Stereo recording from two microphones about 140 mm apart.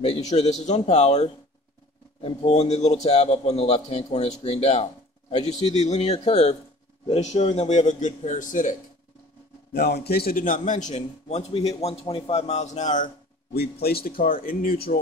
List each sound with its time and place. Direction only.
0.0 s a man's voice: 50° left (ahead or behind)
9.8 s a man's voice: 85° left